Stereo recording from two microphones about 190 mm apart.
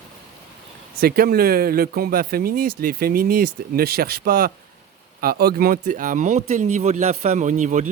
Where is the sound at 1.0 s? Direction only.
50° right (ahead or behind).